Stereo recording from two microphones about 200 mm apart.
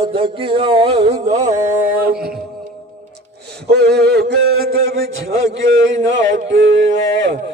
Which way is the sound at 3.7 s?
55° right (ahead or behind).